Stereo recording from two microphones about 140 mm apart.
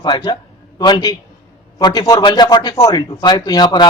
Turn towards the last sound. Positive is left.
turn(degrees=30)  # may be behind; listen again after turning